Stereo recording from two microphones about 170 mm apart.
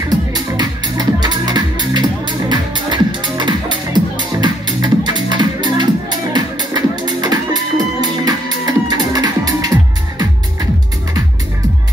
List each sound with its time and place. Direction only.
0.3 s music: 25° right (ahead or behind)